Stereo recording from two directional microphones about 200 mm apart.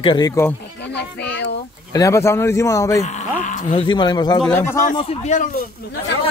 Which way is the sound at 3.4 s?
40° left (ahead or behind).